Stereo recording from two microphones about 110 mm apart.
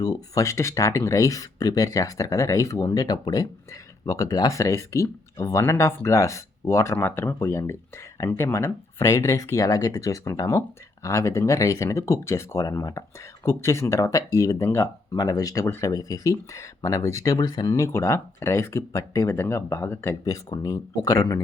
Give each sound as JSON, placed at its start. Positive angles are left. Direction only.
{"t": 0.0, "sound": "speech", "side_deg": 30}
{"t": 17.7, "sound": "speech", "side_deg": 25}
{"t": 20.6, "sound": "speech", "side_deg": 35}